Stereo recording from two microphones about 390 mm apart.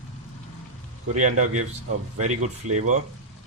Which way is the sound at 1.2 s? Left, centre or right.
Right.